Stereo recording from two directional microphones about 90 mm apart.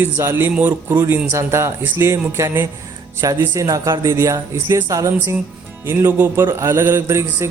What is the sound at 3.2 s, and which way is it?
Speech, 40° right (ahead or behind).